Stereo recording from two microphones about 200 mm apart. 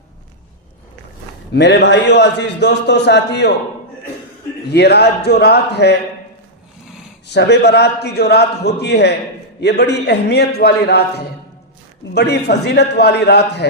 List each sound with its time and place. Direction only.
1.5 s a man's voice: 60° left (ahead or behind)
4.7 s a man's voice: 55° left (ahead or behind)
7.3 s a man's voice: 60° left (ahead or behind)